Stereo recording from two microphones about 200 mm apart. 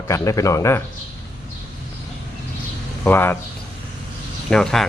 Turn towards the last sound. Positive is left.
turn(degrees=5)  # may be behind; listen again after turning